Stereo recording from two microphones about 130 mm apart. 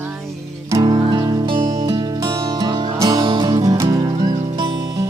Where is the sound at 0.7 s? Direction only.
30° right (ahead or behind).